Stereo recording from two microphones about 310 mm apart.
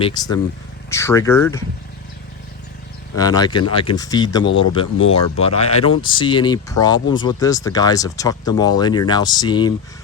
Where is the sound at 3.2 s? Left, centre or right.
Centre.